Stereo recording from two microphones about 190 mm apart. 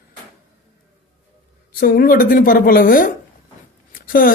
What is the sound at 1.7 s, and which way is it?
A woman's voice, 50° left (ahead or behind).